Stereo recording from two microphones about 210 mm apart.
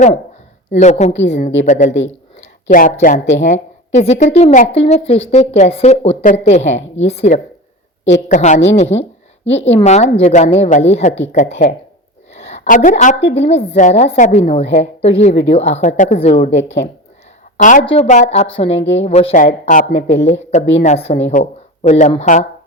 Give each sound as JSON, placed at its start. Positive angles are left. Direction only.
{"t": 0.7, "sound": "a woman's voice", "side_deg": 35}
{"t": 12.3, "sound": "a sound", "side_deg": 30}
{"t": 13.3, "sound": "a woman's voice", "side_deg": 30}
{"t": 16.5, "sound": "a woman's voice", "side_deg": 60}
{"t": 17.6, "sound": "a woman's voice", "side_deg": 35}